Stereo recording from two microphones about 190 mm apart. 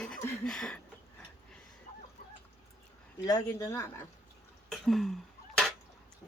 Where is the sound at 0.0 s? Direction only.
5° left (ahead or behind).